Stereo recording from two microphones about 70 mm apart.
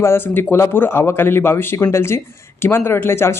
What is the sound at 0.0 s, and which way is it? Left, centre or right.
A man's voice, left.